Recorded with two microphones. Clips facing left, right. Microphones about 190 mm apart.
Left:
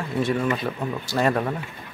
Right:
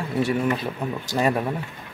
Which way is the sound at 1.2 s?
10° right (ahead or behind).